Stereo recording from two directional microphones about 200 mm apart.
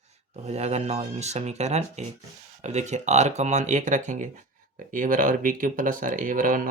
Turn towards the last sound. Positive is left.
turn(degrees=-40)  # may be behind; listen again after turning